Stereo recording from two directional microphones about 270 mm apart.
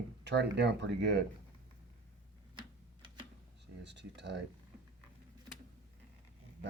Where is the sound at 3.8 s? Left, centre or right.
Right.